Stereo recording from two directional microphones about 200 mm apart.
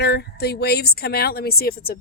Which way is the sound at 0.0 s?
55° left (ahead or behind).